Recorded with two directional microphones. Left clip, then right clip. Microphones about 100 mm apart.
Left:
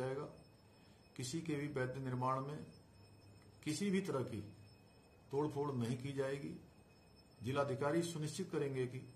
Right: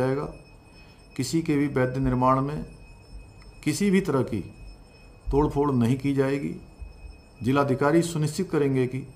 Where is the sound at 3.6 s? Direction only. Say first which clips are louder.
Right 16 dB; 30° left (ahead or behind).